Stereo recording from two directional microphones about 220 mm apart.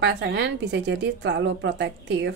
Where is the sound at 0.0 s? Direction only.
50° right (ahead or behind).